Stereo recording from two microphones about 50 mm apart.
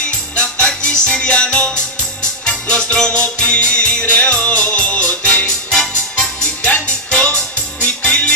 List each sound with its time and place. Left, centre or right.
0.7 s music: left
5.7 s music: centre